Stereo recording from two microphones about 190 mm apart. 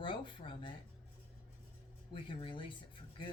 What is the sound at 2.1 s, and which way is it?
Speech, 25° left (ahead or behind).